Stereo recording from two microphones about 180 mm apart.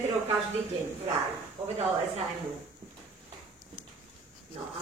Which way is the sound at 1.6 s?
30° right (ahead or behind).